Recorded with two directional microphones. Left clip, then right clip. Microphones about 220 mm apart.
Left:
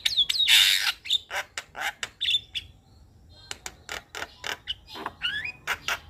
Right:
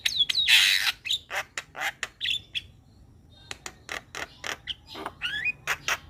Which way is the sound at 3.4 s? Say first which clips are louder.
Even; 15° right (ahead or behind).